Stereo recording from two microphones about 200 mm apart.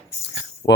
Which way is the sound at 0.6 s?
15° left (ahead or behind).